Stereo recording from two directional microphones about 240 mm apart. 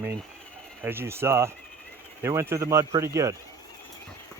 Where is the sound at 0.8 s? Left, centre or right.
Centre.